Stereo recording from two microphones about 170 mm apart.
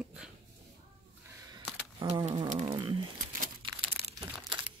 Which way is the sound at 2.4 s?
45° right (ahead or behind).